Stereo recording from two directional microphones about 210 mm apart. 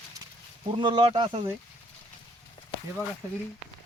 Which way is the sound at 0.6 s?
25° right (ahead or behind).